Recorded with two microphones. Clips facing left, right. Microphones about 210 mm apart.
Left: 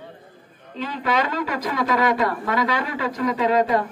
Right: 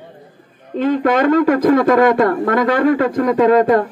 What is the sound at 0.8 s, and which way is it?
Speech, 50° right (ahead or behind).